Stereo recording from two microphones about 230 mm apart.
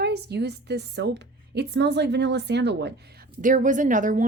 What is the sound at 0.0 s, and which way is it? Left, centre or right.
A woman's voice, right.